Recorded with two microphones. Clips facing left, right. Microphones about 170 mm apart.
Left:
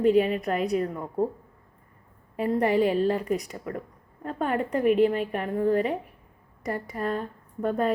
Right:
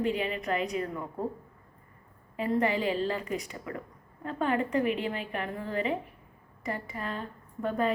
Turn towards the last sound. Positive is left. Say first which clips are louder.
# left 4 dB
turn(degrees=45)  # may be behind; listen again after turning